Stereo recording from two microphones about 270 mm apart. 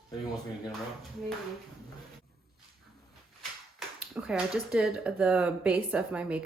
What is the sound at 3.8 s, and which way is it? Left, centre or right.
Speech, centre.